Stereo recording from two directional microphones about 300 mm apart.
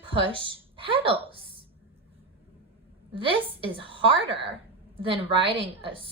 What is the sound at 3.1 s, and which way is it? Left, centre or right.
A woman's voice, centre.